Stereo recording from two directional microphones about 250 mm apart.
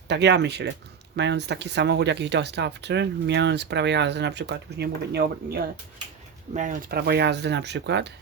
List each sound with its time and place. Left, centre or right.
0.1 s speech: right